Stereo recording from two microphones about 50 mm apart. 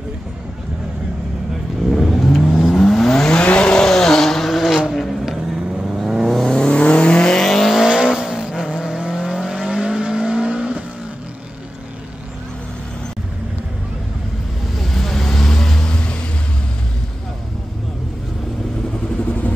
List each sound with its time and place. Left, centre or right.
1.9 s vehicle: centre
6.5 s vehicle: centre
7.8 s vehicle: centre
14.8 s vehicle: centre